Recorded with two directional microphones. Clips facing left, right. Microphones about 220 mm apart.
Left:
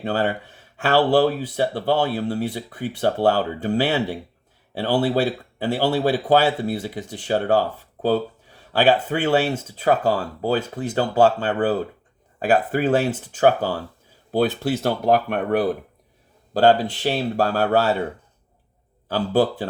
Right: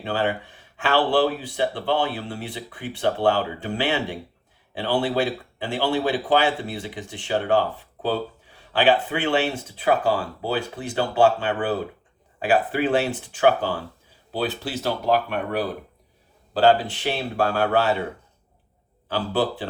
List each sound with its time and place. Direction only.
0.0 s speech: 45° left (ahead or behind)
16.6 s speech: 40° left (ahead or behind)
19.0 s speech: 45° left (ahead or behind)